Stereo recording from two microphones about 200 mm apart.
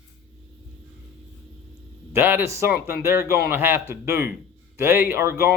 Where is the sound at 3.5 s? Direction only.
10° right (ahead or behind).